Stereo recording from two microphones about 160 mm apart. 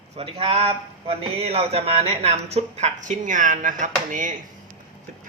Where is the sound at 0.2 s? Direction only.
35° right (ahead or behind).